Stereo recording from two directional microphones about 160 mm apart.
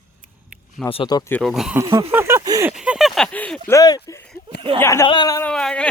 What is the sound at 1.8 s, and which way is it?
Speech, 30° right (ahead or behind).